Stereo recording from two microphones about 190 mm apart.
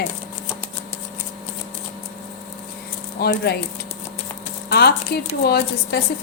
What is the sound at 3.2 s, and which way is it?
Speech, 60° left (ahead or behind).